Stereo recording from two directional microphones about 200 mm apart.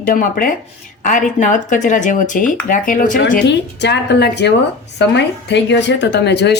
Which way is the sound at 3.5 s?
60° left (ahead or behind).